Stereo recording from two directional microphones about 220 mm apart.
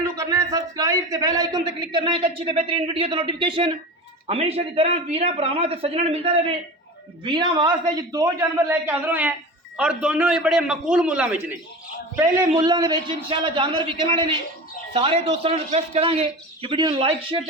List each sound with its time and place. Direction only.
0.0 s a man's voice: 15° right (ahead or behind)
12.1 s a man's voice: 15° right (ahead or behind)